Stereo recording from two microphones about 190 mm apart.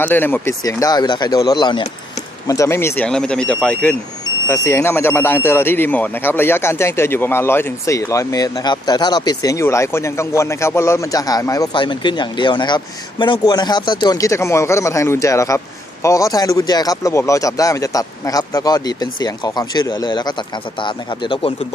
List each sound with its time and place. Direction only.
0.0 s speech: 10° left (ahead or behind); by 21.5 s 25° left (ahead or behind)